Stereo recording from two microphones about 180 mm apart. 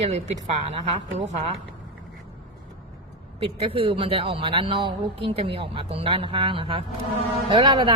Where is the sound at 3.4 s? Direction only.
30° right (ahead or behind).